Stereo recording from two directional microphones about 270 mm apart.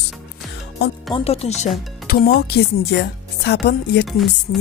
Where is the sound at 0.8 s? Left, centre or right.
Left.